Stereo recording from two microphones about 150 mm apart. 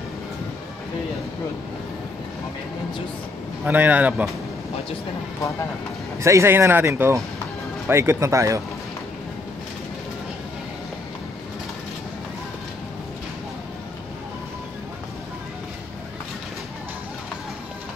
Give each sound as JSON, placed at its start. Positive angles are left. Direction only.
{"t": 3.6, "sound": "speech", "side_deg": -10}
{"t": 6.2, "sound": "speech", "side_deg": -20}